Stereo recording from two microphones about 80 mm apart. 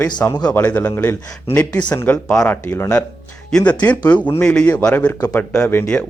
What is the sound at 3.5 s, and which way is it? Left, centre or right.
Speech, centre.